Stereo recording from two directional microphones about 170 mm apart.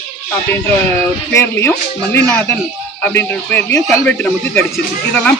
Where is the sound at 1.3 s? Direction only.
15° left (ahead or behind).